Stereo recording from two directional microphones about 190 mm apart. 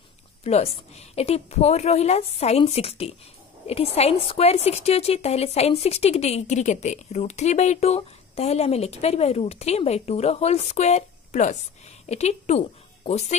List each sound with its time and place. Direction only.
0.4 s a woman's voice: 35° left (ahead or behind)